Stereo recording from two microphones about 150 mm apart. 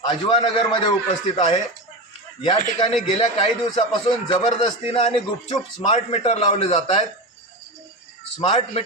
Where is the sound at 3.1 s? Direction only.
40° left (ahead or behind).